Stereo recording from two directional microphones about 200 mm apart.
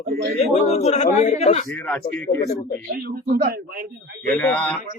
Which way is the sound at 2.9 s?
50° right (ahead or behind).